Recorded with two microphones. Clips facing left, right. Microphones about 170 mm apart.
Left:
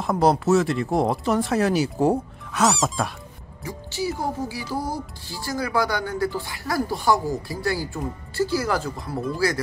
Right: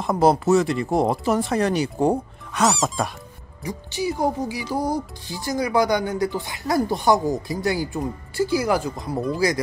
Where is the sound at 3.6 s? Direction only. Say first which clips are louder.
Right 2 dB; 15° right (ahead or behind).